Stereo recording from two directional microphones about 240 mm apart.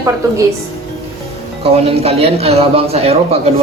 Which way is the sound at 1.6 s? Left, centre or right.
Right.